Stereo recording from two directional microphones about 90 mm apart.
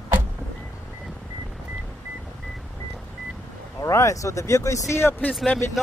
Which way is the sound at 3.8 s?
35° left (ahead or behind).